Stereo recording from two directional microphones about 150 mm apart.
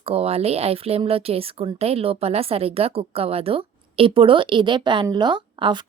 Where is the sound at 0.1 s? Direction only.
40° right (ahead or behind).